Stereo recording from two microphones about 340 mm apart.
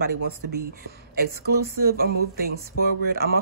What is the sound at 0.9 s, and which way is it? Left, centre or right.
Speech, right.